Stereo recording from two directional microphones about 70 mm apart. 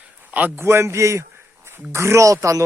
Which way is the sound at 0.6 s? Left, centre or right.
Right.